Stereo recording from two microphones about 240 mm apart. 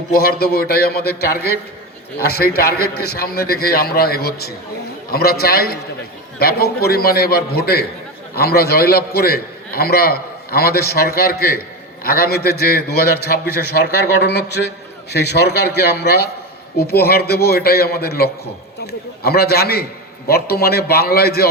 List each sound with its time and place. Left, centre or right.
0.1 s a man's voice: left